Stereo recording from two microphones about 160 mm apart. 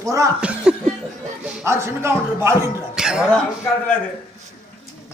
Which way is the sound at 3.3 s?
10° left (ahead or behind).